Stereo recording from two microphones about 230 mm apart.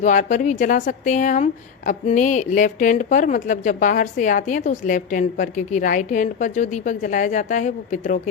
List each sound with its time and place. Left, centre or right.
0.0 s a woman's voice: left